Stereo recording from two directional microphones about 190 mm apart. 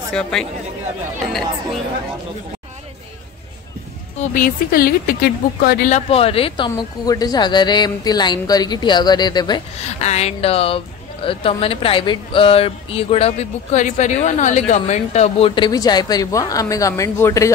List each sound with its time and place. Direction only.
0.1 s speech: 5° left (ahead or behind)
4.3 s speech: 50° left (ahead or behind)
5.9 s speech: 35° left (ahead or behind)
9.8 s speech: 35° left (ahead or behind); by 17.5 s 15° left (ahead or behind)